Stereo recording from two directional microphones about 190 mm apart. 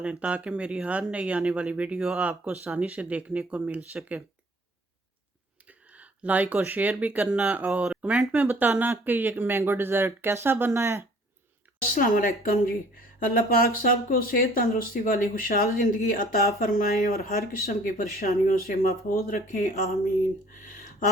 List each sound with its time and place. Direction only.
0.0 s speech: 5° right (ahead or behind)
5.6 s speech: 5° right (ahead or behind)
11.9 s speech: 45° left (ahead or behind)